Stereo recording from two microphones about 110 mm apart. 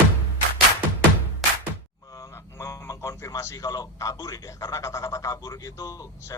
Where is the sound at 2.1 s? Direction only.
30° left (ahead or behind).